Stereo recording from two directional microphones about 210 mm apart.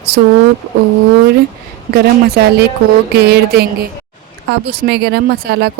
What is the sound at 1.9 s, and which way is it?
A woman's voice, 50° right (ahead or behind).